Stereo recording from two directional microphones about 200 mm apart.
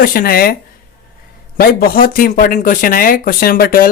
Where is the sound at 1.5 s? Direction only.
50° left (ahead or behind).